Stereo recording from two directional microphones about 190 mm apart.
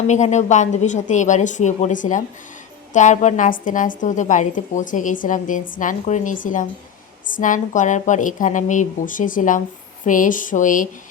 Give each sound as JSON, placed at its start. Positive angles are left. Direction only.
{"t": 0.1, "sound": "a woman's voice", "side_deg": 40}